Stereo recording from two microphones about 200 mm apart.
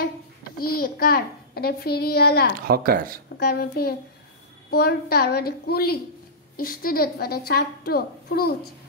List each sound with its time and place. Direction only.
0.0 s a child's voice: 50° left (ahead or behind)
2.6 s speech: 45° right (ahead or behind)
3.3 s a woman's voice: 55° left (ahead or behind)